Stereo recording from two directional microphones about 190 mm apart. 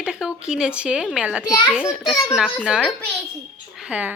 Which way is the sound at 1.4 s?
20° left (ahead or behind).